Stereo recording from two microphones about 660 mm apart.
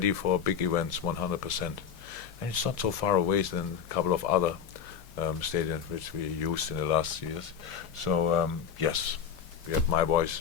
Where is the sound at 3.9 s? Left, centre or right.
Left.